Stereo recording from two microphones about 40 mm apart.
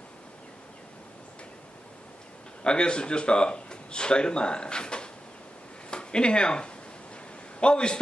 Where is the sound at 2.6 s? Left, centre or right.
Left.